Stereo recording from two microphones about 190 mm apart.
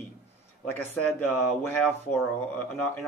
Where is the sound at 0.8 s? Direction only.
10° left (ahead or behind).